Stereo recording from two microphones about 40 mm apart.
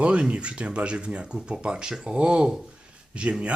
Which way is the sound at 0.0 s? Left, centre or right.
Right.